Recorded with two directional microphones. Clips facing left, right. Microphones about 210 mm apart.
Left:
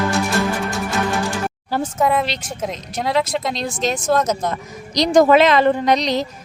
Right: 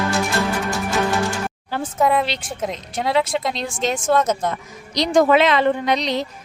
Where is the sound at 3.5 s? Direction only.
35° left (ahead or behind).